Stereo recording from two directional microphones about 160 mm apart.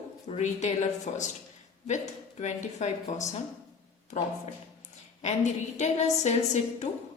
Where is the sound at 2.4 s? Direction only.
45° left (ahead or behind).